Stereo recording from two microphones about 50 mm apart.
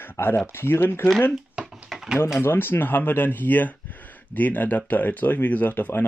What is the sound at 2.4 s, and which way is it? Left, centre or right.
Speech, left.